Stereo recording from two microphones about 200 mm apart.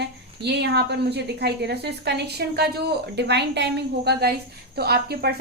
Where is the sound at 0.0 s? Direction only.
55° right (ahead or behind).